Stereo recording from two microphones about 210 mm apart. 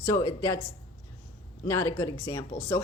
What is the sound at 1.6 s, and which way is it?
Speech, 15° left (ahead or behind).